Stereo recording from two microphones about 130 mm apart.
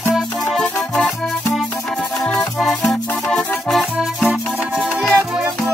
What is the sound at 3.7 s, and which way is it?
Music, centre (ahead or behind).